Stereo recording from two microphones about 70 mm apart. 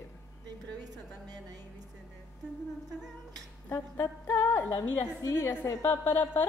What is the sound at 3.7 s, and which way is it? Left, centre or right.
A woman's voice, left.